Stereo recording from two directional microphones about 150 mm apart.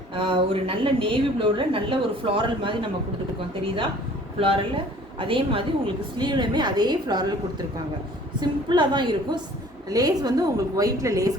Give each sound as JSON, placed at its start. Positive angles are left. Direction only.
{"t": 0.1, "sound": "a woman's voice", "side_deg": -35}
{"t": 8.4, "sound": "a woman's voice", "side_deg": -30}